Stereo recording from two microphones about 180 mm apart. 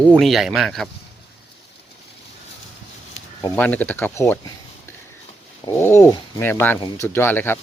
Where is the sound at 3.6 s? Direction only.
10° left (ahead or behind).